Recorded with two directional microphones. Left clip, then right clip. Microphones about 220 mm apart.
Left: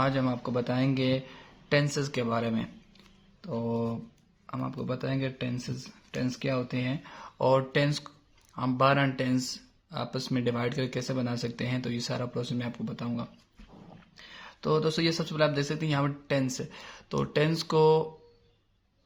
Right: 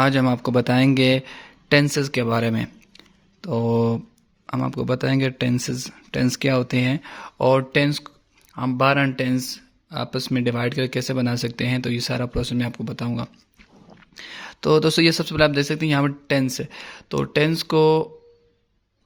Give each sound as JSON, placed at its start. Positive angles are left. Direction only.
{"t": 0.0, "sound": "speech", "side_deg": -40}